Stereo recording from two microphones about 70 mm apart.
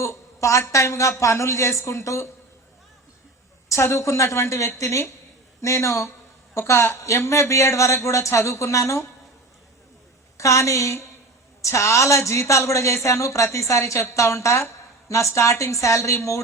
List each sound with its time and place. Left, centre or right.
0.0 s a sound: left
0.7 s a woman's voice: left
3.7 s a woman's voice: left
10.3 s a woman's voice: left